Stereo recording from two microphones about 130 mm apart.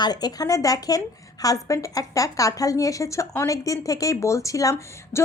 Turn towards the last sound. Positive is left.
turn(degrees=25)  # may be behind; listen again after turning